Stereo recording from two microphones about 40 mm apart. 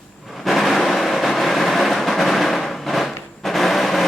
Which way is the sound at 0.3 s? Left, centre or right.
Centre.